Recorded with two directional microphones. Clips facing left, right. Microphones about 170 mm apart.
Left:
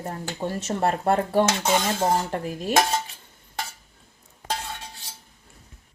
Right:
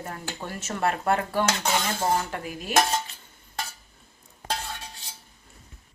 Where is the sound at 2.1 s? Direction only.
35° left (ahead or behind).